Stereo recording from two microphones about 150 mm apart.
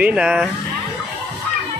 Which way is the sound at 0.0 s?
5° right (ahead or behind).